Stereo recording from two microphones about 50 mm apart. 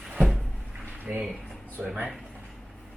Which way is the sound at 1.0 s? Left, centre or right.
Right.